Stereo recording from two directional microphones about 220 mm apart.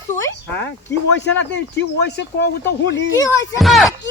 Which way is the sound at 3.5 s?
Centre (ahead or behind).